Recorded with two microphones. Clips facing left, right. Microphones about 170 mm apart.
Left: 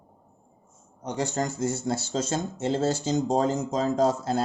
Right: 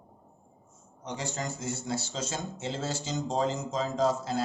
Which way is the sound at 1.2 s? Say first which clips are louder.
Left 9 dB; 45° left (ahead or behind).